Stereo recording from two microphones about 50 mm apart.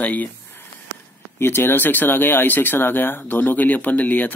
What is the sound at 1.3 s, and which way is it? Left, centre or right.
Speech, left.